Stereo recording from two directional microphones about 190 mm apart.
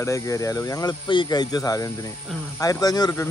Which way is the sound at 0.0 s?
15° left (ahead or behind).